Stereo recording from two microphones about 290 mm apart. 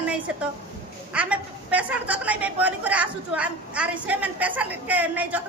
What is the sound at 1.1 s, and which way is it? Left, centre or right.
A woman's voice, centre.